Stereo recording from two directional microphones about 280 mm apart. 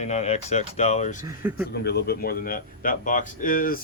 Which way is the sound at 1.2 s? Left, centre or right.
Centre.